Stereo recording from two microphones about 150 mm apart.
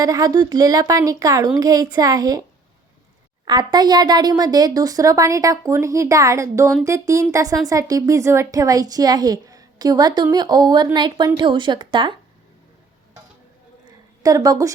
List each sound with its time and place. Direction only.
0.0 s a woman's voice: 25° right (ahead or behind)
3.4 s a woman's voice: 30° right (ahead or behind)
13.8 s a sound: 25° right (ahead or behind)